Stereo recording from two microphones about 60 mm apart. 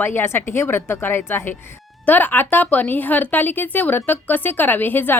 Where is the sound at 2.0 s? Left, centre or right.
Left.